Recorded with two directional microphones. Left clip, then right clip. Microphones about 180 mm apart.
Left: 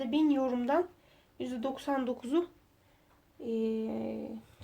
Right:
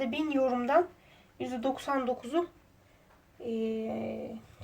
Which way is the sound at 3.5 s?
55° left (ahead or behind).